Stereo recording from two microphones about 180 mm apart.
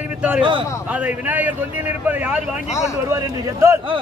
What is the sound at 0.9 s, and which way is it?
A man's voice, 10° right (ahead or behind).